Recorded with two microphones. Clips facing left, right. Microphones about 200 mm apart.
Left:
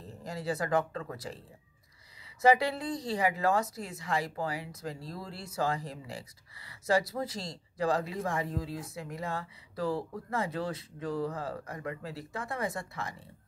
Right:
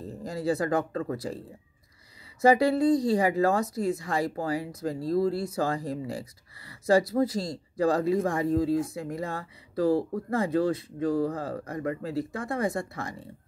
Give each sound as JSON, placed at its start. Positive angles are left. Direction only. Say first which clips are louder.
{"t": 0.0, "sound": "speech", "louder": "right 7 dB", "side_deg": -35}
{"t": 2.4, "sound": "speech", "louder": "right 5 dB", "side_deg": -40}